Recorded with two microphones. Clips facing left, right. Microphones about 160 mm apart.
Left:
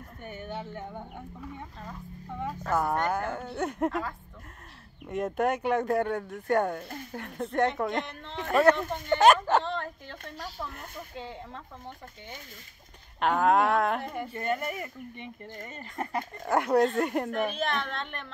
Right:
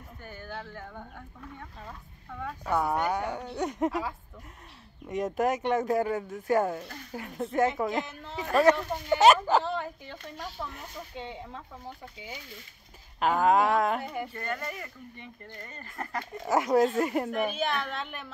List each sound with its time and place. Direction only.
0.2 s speech: 20° left (ahead or behind)
2.2 s a woman's voice: 20° left (ahead or behind)
2.6 s speech: centre (ahead or behind)
14.3 s speech: 20° left (ahead or behind)
16.3 s speech: centre (ahead or behind)